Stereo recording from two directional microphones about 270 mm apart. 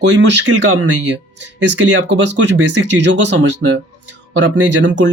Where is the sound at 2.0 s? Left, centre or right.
Right.